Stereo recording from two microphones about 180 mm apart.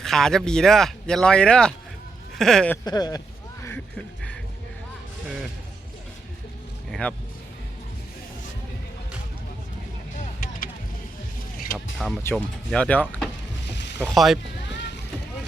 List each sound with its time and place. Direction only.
0.0 s speech: centre (ahead or behind)
2.8 s speech: 20° left (ahead or behind)
3.6 s music: 10° left (ahead or behind)
7.0 s speech: 10° left (ahead or behind)
11.9 s speech: centre (ahead or behind)